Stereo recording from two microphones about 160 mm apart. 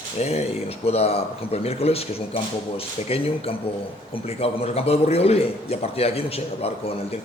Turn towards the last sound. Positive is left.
turn(degrees=40)  # may be behind; listen again after turning